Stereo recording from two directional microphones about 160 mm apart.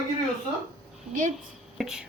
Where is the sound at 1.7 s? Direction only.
5° right (ahead or behind).